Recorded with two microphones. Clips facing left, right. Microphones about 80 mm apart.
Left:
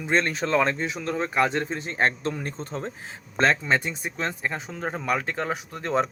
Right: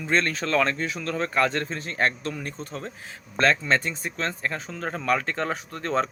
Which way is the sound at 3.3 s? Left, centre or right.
Centre.